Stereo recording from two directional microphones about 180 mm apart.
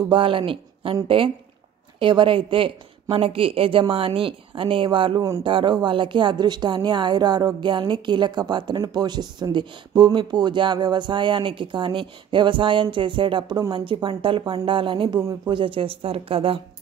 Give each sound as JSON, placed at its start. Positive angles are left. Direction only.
{"t": 0.1, "sound": "a woman's voice", "side_deg": -30}